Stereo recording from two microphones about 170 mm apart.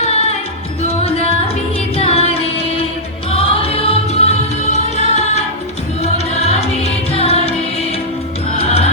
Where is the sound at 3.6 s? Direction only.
35° left (ahead or behind).